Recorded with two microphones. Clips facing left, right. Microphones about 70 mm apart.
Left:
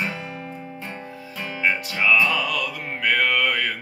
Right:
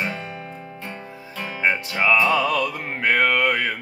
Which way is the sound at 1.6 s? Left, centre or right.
Right.